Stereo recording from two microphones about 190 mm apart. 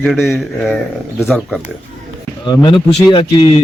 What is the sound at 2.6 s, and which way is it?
Speech, 25° left (ahead or behind).